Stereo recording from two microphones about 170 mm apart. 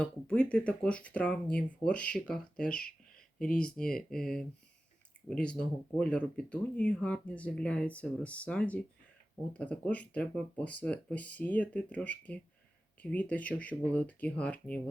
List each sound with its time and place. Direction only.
0.0 s speech: 5° left (ahead or behind)
2.8 s a sound: 55° left (ahead or behind)
3.3 s speech: 5° left (ahead or behind)